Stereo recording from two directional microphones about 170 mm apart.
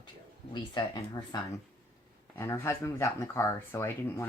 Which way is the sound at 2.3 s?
15° left (ahead or behind).